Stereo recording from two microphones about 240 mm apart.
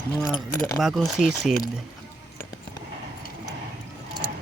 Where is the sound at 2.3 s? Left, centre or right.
Centre.